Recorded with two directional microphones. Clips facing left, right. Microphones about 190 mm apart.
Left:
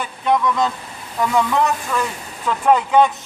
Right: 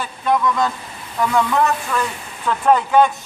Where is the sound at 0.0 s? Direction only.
20° left (ahead or behind).